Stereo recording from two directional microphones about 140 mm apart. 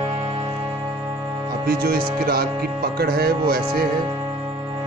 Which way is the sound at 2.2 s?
90° right.